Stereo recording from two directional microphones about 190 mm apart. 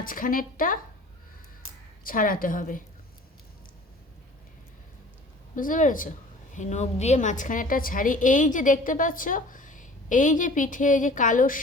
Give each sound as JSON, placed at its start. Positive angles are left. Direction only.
{"t": 0.0, "sound": "a woman's voice", "side_deg": 45}
{"t": 2.0, "sound": "a woman's voice", "side_deg": 45}
{"t": 5.5, "sound": "a woman's voice", "side_deg": 45}